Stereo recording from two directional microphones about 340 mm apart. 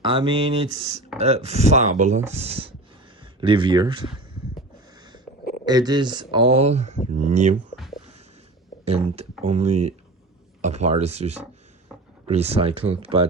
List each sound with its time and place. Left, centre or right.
0.0 s speech: centre
5.6 s speech: centre
8.8 s speech: centre